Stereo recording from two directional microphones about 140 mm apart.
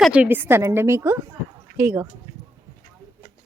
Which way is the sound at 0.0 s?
10° right (ahead or behind).